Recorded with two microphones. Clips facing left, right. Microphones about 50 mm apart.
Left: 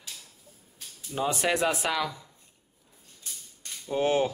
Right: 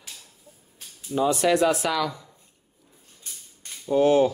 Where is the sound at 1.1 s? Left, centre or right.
Left.